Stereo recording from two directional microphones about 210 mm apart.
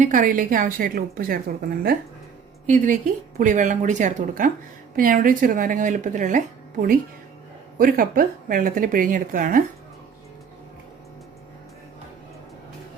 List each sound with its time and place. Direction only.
0.0 s a woman's voice: 40° right (ahead or behind)